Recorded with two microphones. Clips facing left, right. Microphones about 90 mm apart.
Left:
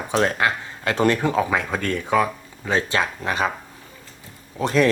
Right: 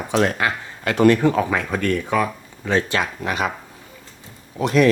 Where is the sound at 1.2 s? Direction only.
20° left (ahead or behind).